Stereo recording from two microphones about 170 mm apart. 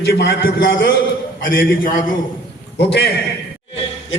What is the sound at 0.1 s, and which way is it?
Speech, 80° left.